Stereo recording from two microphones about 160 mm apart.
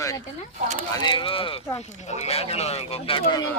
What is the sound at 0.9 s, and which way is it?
Speech, 30° left (ahead or behind).